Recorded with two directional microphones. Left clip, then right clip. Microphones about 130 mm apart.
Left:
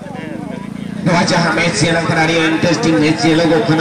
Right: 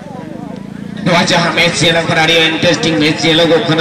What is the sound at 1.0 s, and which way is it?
A man's voice, 25° right (ahead or behind).